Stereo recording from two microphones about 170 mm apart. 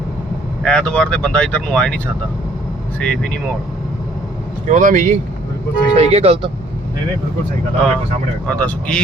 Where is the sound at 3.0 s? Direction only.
5° left (ahead or behind).